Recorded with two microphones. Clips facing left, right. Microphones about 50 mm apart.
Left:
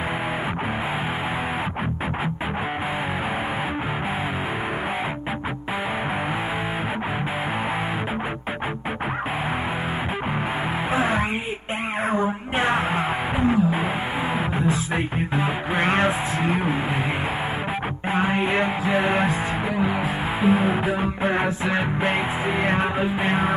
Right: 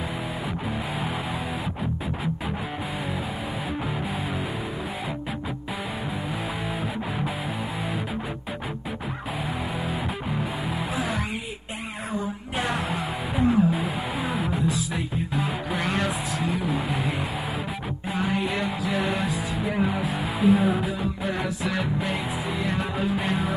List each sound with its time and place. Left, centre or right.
10.9 s music: left
14.6 s music: left
18.1 s music: left
21.0 s music: left